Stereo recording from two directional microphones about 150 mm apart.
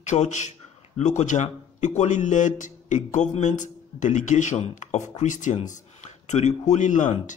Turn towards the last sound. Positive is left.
turn(degrees=55)  # may be behind; listen again after turning